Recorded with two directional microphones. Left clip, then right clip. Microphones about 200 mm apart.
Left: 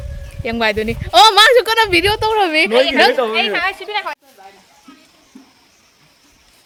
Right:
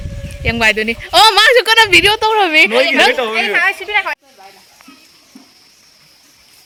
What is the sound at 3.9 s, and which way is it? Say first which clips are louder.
Speech: right 6 dB; 30° right (ahead or behind).